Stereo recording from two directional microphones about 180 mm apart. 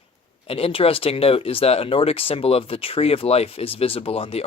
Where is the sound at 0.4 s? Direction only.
30° left (ahead or behind).